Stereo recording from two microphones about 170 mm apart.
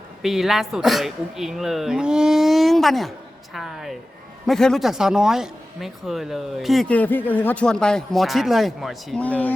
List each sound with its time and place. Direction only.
0.2 s a man's voice: centre (ahead or behind)